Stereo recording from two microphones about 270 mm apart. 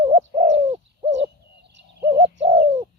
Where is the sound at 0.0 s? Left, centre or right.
Right.